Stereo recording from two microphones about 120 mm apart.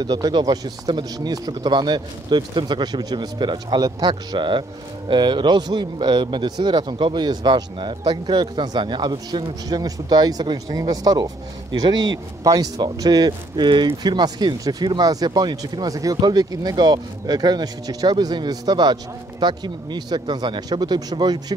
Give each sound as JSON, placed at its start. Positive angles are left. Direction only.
{"t": 0.0, "sound": "a man's voice", "side_deg": -35}